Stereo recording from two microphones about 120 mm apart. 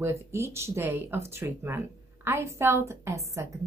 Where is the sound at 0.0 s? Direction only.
20° right (ahead or behind).